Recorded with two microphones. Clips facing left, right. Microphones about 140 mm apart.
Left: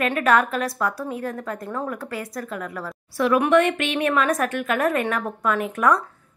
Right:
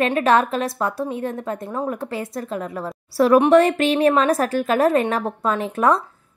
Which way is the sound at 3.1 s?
35° right (ahead or behind).